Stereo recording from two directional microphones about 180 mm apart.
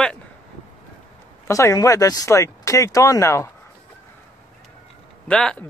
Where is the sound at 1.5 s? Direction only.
15° left (ahead or behind).